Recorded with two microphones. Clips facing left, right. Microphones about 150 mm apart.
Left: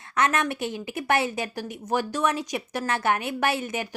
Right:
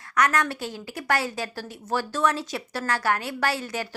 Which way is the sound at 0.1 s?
25° left (ahead or behind).